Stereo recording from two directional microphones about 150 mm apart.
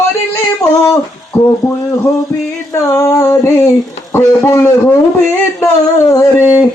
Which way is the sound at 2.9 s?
20° left (ahead or behind).